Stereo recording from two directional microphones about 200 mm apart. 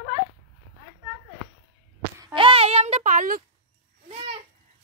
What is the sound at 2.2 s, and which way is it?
A child's voice, 25° right (ahead or behind).